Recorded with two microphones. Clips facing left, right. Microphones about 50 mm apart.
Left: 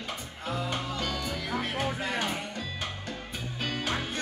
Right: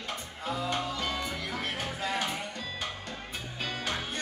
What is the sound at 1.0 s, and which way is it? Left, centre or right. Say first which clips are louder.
Music: even; centre.